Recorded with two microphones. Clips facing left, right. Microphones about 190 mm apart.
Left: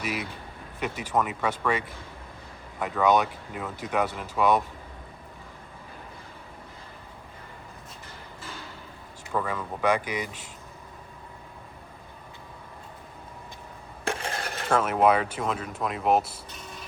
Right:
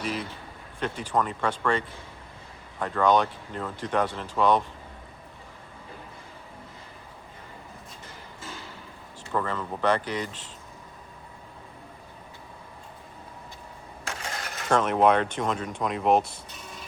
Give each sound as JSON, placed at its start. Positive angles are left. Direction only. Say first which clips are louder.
{"t": 0.0, "sound": "speech", "louder": "right 1 dB", "side_deg": 10}
{"t": 9.3, "sound": "speech", "louder": "right 1 dB", "side_deg": 10}
{"t": 14.2, "sound": "dishes", "louder": "left 3 dB", "side_deg": 30}
{"t": 14.7, "sound": "speech", "louder": "right 1 dB", "side_deg": 5}